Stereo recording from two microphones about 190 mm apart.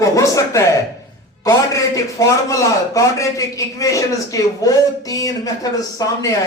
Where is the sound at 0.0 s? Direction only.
15° left (ahead or behind).